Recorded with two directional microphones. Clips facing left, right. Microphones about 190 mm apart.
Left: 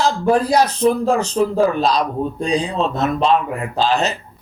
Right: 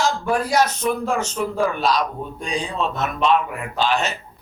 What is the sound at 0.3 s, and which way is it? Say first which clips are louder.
Speech: left 6 dB; 35° left (ahead or behind).